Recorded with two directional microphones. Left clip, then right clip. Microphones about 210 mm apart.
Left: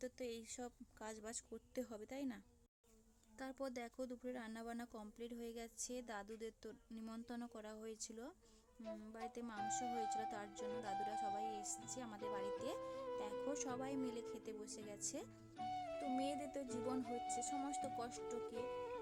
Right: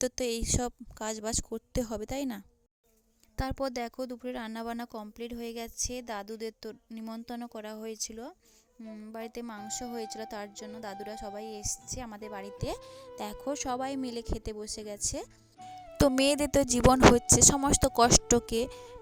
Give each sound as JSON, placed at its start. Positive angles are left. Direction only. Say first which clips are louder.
{"t": 0.0, "sound": "a woman's voice", "louder": "right 17 dB", "side_deg": -45}
{"t": 15.5, "sound": "music", "louder": "even", "side_deg": 0}
{"t": 16.1, "sound": "a woman's voice", "louder": "right 18 dB", "side_deg": -50}